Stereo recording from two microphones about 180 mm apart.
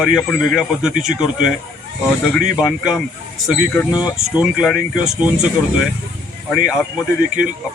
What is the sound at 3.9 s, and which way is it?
Speech, 25° left (ahead or behind).